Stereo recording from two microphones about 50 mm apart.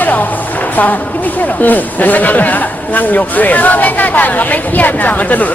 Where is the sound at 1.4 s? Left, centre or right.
Left.